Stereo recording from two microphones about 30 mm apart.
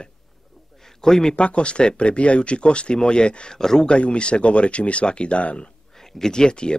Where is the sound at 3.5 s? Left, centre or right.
Centre.